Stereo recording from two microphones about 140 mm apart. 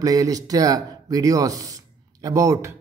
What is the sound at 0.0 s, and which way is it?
Speech, 25° right (ahead or behind).